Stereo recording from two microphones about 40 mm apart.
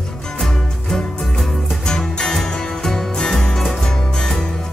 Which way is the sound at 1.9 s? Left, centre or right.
Centre.